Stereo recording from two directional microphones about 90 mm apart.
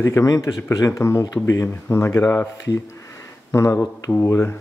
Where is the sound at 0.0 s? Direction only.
35° left (ahead or behind).